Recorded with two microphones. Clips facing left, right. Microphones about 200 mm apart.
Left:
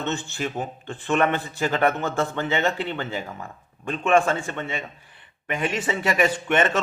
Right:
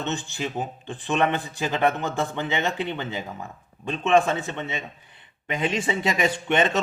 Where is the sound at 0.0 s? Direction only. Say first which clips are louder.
Left 1 dB; 15° right (ahead or behind).